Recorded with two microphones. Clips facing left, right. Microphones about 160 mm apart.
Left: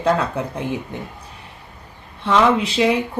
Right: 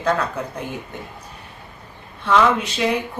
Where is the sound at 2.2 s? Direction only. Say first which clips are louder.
Left 1 dB; 25° left (ahead or behind).